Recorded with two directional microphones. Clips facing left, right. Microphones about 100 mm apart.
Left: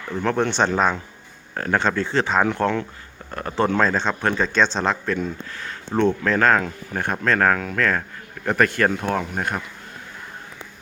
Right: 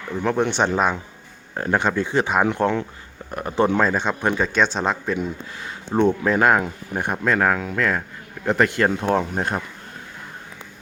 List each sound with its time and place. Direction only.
0.1 s speech: 10° right (ahead or behind); by 9.6 s 30° right (ahead or behind)